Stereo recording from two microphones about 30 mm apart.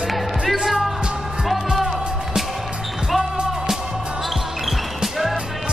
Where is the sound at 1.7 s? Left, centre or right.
Centre.